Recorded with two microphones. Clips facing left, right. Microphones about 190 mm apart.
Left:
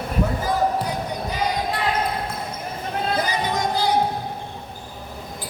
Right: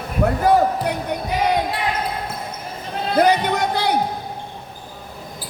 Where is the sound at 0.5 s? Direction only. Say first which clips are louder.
Right 9 dB; 60° right (ahead or behind).